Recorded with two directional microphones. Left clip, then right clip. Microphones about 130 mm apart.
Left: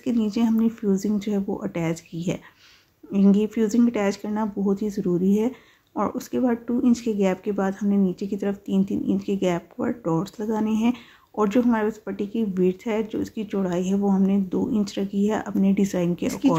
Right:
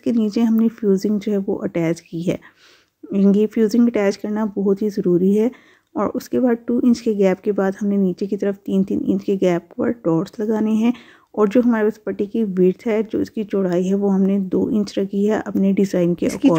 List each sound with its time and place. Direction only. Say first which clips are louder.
0.0 s speech: right 5 dB; 40° right (ahead or behind)